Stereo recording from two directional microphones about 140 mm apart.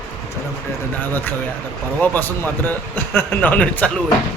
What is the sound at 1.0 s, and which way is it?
A man's voice, 15° left (ahead or behind).